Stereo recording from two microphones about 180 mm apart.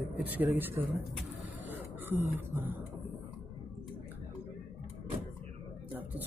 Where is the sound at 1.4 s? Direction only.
10° right (ahead or behind).